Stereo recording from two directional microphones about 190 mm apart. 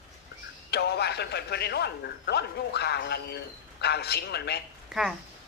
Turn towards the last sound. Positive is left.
turn(degrees=-5)  # may be behind; listen again after turning